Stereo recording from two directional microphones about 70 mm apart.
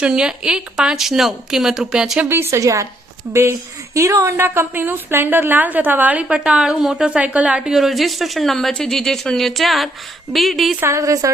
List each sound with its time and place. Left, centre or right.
0.0 s speech: centre
2.3 s a woman's voice: right
6.2 s speech: centre
7.7 s speech: centre
10.8 s a woman's voice: right
11.0 s a woman's voice: right